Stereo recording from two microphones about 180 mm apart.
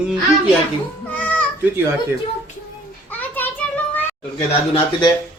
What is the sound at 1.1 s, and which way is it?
Child singing, 10° left (ahead or behind).